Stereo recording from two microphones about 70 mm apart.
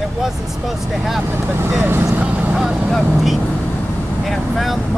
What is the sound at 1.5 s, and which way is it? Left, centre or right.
Speech, right.